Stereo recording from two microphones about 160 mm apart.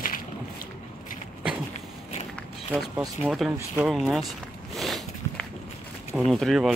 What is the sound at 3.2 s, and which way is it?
Speech, centre (ahead or behind).